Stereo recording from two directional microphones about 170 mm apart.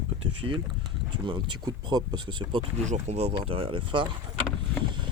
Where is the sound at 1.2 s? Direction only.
30° right (ahead or behind).